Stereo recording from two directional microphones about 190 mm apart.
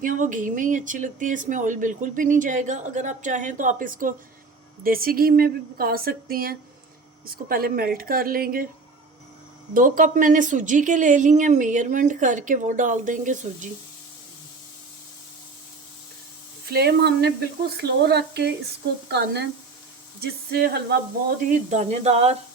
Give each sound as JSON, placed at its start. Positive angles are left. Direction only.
{"t": 0.0, "sound": "speech", "side_deg": -45}
{"t": 9.7, "sound": "a woman's voice", "side_deg": -45}
{"t": 16.6, "sound": "speech", "side_deg": -55}
{"t": 20.5, "sound": "speech", "side_deg": -55}
{"t": 21.5, "sound": "a woman's voice", "side_deg": -35}